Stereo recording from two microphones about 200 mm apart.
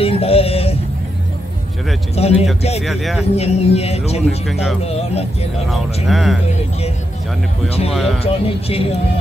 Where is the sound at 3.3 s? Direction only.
30° left (ahead or behind).